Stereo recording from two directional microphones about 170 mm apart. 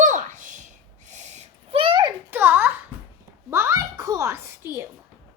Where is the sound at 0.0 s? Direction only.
50° right (ahead or behind); by 2.0 s 30° right (ahead or behind).